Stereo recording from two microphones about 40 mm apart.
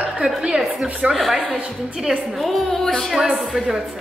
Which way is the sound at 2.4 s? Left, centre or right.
Centre.